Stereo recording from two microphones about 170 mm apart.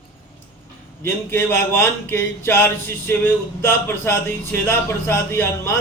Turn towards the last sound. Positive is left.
turn(degrees=15)  # may be behind; listen again after turning